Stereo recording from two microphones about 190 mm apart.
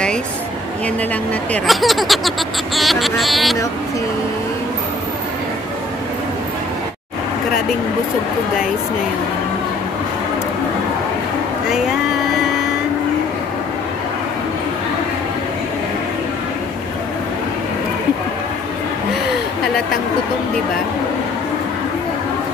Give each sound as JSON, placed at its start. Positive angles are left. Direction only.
{"t": 1.5, "sound": "speech", "side_deg": 0}